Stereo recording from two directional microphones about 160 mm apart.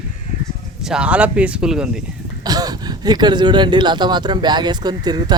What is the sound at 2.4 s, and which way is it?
Speech, 25° right (ahead or behind).